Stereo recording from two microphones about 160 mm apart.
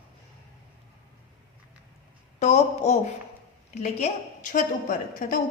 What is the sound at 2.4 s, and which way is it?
A woman's voice, 45° left (ahead or behind).